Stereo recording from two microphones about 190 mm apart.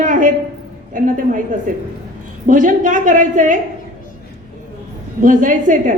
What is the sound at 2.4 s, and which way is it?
A woman's voice, 45° right (ahead or behind).